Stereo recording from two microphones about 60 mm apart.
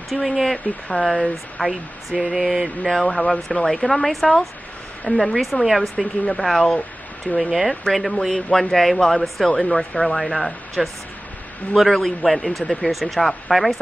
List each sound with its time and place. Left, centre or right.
0.1 s speech: centre
1.7 s speech: centre
7.9 s speech: centre
8.2 s speech: centre